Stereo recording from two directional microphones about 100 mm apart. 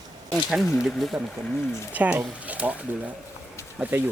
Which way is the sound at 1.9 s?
15° right (ahead or behind).